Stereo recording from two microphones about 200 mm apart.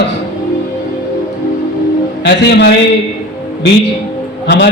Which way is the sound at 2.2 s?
55° left (ahead or behind).